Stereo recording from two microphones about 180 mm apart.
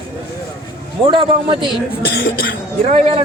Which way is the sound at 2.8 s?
35° right (ahead or behind).